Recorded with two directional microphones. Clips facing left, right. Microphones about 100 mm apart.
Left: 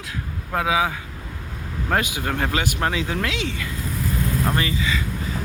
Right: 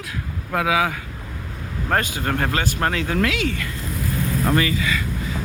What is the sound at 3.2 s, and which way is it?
Speech, 25° left (ahead or behind).